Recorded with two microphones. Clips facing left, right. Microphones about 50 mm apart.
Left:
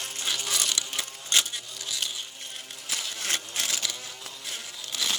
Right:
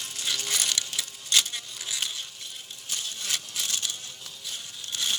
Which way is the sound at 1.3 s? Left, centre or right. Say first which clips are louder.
Even; left.